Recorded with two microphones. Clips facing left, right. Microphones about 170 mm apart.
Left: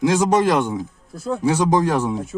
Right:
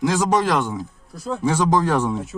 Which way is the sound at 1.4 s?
15° left (ahead or behind).